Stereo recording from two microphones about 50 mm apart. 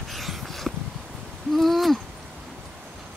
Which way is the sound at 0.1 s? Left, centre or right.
Centre.